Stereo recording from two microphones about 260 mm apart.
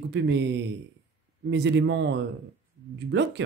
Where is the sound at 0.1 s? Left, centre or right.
Right.